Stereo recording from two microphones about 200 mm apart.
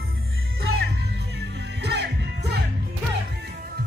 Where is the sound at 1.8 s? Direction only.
55° right (ahead or behind).